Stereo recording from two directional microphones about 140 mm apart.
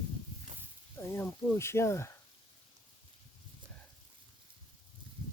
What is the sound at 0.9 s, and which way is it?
Speech, 20° left (ahead or behind).